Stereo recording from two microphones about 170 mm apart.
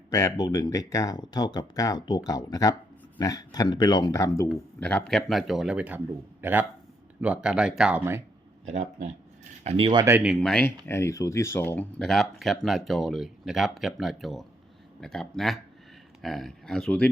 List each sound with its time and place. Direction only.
0.1 s speech: 20° left (ahead or behind)
4.8 s speech: 5° left (ahead or behind); by 8.2 s 10° right (ahead or behind)
8.6 s speech: 45° right (ahead or behind)
9.6 s speech: 30° right (ahead or behind)
10.1 s speech: 10° right (ahead or behind)
10.4 s speech: 5° left (ahead or behind)
10.8 s speech: 15° left (ahead or behind)